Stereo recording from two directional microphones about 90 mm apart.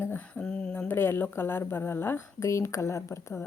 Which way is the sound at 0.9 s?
25° left (ahead or behind).